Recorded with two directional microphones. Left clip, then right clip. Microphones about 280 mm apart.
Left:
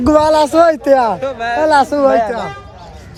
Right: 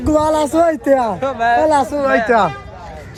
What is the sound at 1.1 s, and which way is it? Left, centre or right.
Speech, right.